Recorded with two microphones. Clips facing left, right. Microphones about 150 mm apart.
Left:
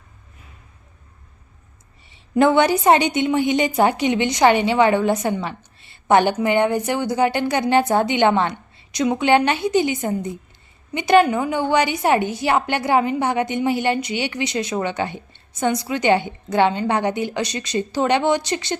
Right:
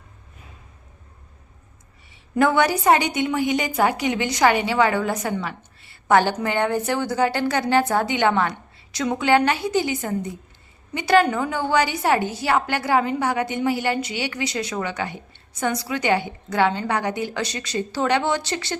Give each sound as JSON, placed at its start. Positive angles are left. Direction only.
{"t": 2.3, "sound": "a woman's voice", "side_deg": 25}